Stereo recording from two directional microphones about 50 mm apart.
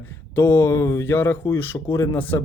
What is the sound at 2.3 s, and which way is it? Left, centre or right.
Speech, left.